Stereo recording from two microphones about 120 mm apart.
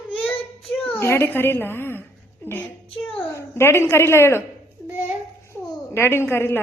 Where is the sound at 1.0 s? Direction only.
20° left (ahead or behind).